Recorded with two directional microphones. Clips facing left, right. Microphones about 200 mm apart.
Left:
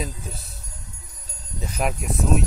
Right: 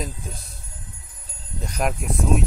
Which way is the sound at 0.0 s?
Centre (ahead or behind).